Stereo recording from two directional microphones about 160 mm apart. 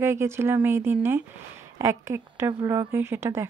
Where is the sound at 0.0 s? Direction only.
15° right (ahead or behind).